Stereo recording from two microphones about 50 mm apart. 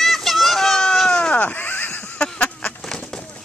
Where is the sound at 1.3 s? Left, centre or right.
Left.